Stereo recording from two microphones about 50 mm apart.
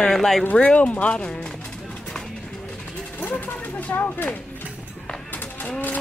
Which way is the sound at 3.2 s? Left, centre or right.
Left.